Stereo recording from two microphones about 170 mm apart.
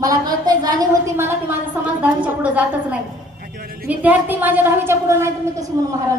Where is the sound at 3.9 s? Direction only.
10° right (ahead or behind).